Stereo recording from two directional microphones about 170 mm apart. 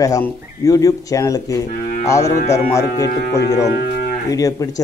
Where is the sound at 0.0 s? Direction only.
20° left (ahead or behind).